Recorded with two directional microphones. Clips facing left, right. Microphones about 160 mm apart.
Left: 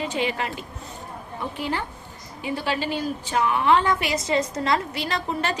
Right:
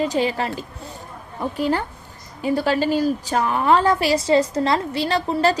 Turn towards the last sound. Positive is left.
turn(degrees=-35)  # may be behind; listen again after turning